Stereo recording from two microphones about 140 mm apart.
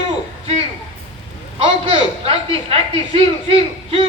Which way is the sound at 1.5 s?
35° right (ahead or behind).